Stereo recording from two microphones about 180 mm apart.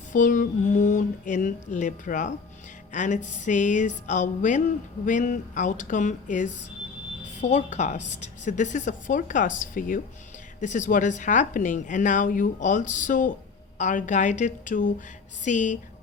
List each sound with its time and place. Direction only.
0.1 s a woman's voice: 45° left (ahead or behind)